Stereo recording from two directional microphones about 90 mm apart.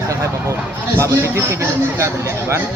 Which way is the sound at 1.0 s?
30° right (ahead or behind).